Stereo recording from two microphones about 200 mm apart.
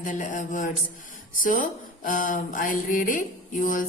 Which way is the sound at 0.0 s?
40° left (ahead or behind).